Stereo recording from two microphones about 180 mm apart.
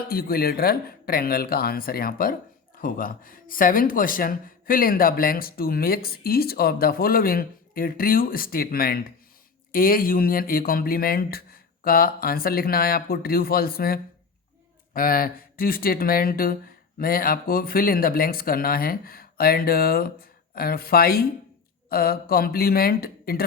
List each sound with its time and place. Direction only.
0.1 s speech: 55° left (ahead or behind)